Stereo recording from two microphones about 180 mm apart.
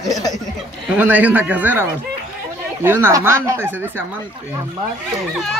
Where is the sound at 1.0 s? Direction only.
10° right (ahead or behind).